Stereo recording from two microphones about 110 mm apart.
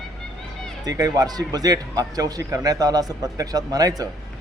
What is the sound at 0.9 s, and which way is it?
A man's voice, 35° right (ahead or behind).